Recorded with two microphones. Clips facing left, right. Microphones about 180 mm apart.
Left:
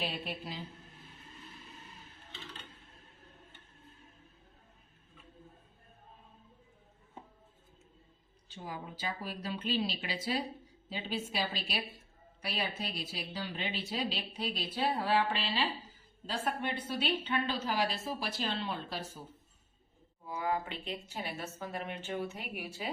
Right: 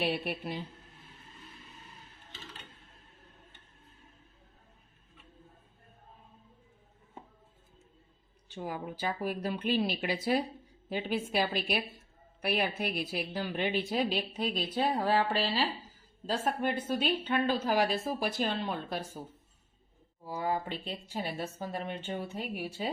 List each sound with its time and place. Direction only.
0.0 s speech: 65° right (ahead or behind)
8.5 s a woman's voice: 55° right (ahead or behind)
20.2 s speech: 35° right (ahead or behind)